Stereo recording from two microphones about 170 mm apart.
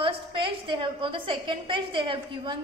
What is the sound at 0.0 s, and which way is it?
A woman's voice, 30° right (ahead or behind).